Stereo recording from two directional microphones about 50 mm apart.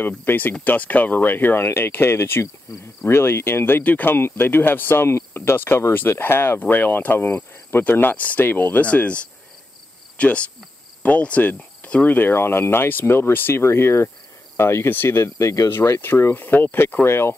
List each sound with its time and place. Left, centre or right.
0.0 s speech: left
1.7 s speech: left
3.8 s speech: left
4.1 s speech: left
5.9 s speech: left
6.6 s speech: left
7.8 s speech: left
8.8 s speech: left
10.1 s cricket: left
12.2 s speech: left
15.0 s speech: left
15.7 s speech: left
16.3 s speech: left
17.0 s speech: left